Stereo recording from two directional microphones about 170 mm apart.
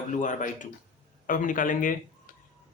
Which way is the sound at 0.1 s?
50° left (ahead or behind).